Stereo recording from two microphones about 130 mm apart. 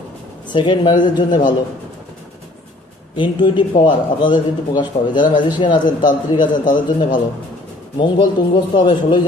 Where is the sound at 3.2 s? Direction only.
35° left (ahead or behind).